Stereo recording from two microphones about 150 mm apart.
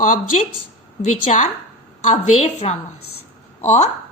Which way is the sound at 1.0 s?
55° left (ahead or behind).